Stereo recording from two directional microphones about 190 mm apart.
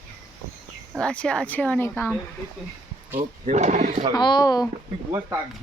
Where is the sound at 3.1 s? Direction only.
40° right (ahead or behind).